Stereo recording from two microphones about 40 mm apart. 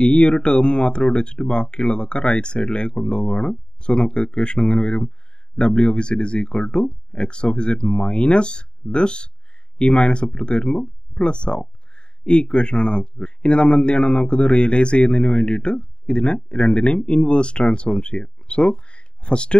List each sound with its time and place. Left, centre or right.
0.0 s speech: left